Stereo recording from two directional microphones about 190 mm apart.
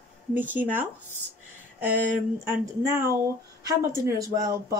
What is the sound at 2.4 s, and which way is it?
Speech, 15° right (ahead or behind).